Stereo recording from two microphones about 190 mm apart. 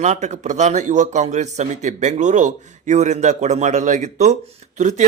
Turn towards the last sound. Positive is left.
turn(degrees=-40)  # may be behind; listen again after turning